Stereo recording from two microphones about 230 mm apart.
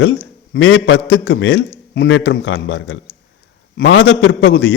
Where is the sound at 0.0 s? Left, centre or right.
Left.